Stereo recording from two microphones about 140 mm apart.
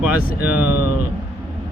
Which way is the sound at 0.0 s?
10° right (ahead or behind).